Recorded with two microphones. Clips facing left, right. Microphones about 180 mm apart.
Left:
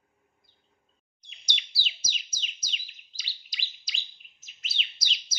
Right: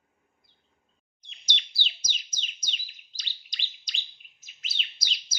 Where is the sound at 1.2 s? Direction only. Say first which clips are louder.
Right 2 dB; 10° left (ahead or behind).